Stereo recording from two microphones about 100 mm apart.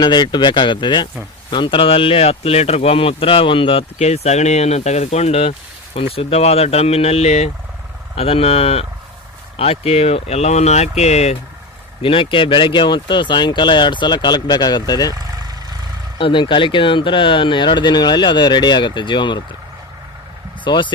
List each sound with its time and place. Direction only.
0.0 s speech: 50° left (ahead or behind); by 7.5 s 90° left
8.1 s speech: 75° left (ahead or behind)
12.0 s speech: 65° left (ahead or behind); by 15.1 s 45° left (ahead or behind)
15.1 s vehicle: 40° right (ahead or behind)
16.1 s speech: 55° left (ahead or behind)
20.7 s speech: 50° left (ahead or behind)